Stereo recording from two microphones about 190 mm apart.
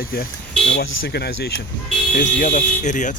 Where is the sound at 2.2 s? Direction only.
45° left (ahead or behind).